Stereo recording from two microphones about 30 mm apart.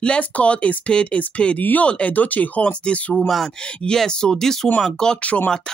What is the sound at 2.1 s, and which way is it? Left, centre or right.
Speech, left.